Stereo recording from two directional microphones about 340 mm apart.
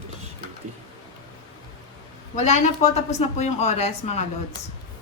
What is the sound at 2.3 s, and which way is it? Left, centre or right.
Speech, centre.